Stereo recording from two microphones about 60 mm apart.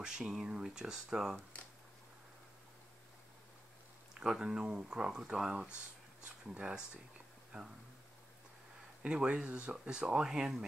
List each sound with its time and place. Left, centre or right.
0.0 s speech: centre
4.1 s speech: centre
9.0 s speech: centre